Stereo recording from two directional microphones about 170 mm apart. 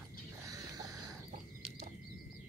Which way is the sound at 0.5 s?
20° right (ahead or behind).